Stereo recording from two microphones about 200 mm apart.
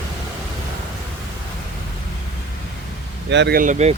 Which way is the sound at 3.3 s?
60° right (ahead or behind).